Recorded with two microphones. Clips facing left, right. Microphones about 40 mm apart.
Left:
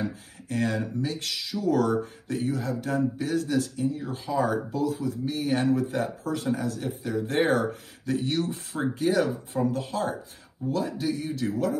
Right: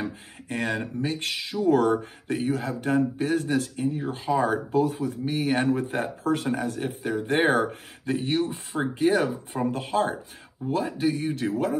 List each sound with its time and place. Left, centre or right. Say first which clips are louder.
0.0 s speech: left 1 dB; right